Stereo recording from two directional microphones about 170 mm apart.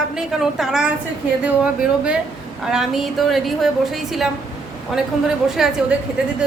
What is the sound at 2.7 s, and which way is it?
A woman's voice, centre (ahead or behind).